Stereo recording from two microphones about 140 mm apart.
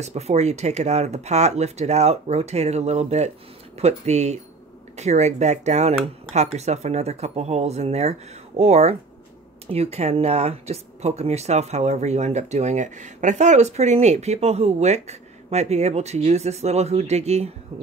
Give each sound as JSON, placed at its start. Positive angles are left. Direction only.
{"t": 0.0, "sound": "speech", "side_deg": -50}